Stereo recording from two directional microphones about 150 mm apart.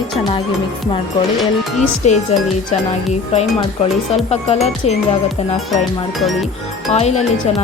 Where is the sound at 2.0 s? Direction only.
50° left (ahead or behind).